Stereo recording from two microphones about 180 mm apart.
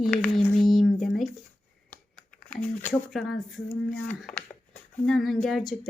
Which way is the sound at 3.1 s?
Centre (ahead or behind).